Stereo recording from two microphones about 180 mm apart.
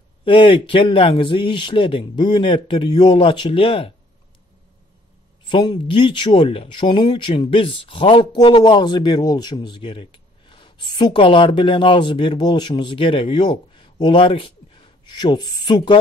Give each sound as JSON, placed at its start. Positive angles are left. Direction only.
{"t": 0.2, "sound": "speech", "side_deg": 30}
{"t": 5.5, "sound": "speech", "side_deg": 25}